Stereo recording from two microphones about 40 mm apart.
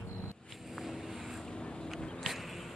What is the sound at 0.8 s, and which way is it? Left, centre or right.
Vehicle, centre.